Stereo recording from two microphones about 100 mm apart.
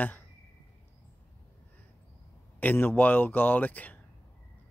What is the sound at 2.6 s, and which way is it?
Speech, 20° left (ahead or behind).